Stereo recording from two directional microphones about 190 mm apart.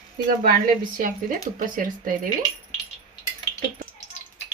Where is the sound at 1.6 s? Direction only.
45° right (ahead or behind).